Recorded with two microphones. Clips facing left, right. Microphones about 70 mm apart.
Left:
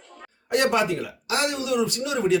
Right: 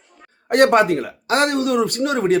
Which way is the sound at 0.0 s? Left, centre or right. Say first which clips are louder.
Left 4 dB; left.